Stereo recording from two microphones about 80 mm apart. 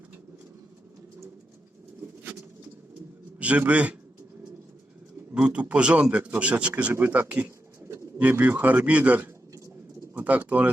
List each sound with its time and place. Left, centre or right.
3.3 s a man's voice: centre
5.3 s a man's voice: centre